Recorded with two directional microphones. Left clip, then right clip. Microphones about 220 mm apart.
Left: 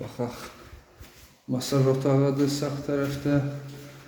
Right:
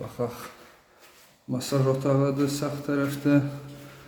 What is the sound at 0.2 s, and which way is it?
Speech, 5° right (ahead or behind).